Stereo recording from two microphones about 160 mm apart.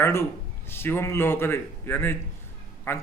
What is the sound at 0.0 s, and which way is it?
A man's voice, 15° left (ahead or behind).